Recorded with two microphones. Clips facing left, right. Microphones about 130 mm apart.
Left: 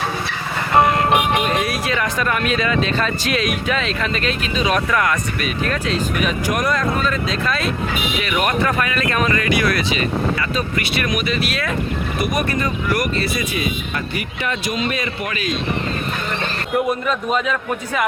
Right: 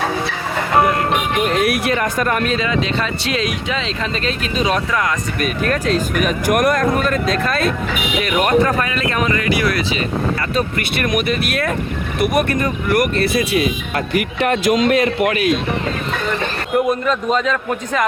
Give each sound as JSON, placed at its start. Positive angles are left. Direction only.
{"t": 1.5, "sound": "speech", "side_deg": -65}
{"t": 2.0, "sound": "speech", "side_deg": -45}
{"t": 2.6, "sound": "speech", "side_deg": -20}
{"t": 5.4, "sound": "speech", "side_deg": -45}
{"t": 10.5, "sound": "speech", "side_deg": -50}
{"t": 16.9, "sound": "a man's voice", "side_deg": 10}